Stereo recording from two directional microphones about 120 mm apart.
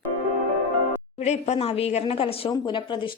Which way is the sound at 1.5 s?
55° left (ahead or behind).